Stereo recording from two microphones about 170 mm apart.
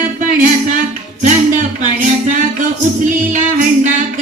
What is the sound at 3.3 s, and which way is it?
Music, 50° right (ahead or behind).